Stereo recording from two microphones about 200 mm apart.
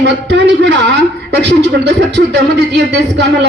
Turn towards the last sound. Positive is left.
turn(degrees=-60)  # may be behind; listen again after turning